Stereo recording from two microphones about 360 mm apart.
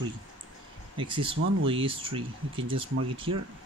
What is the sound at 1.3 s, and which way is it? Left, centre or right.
Speech, right.